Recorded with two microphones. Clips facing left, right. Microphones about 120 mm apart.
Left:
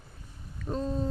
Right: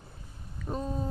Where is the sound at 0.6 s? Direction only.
10° right (ahead or behind).